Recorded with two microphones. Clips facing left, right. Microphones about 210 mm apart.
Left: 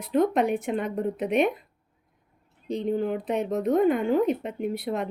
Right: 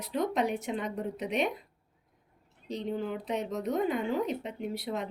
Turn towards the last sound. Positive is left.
turn(degrees=55)  # may be behind; listen again after turning